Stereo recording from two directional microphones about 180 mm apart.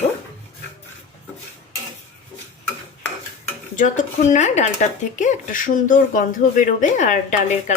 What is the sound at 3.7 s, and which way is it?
Speech, 45° left (ahead or behind).